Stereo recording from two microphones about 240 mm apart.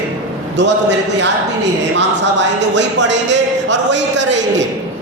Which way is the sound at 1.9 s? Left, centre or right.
Right.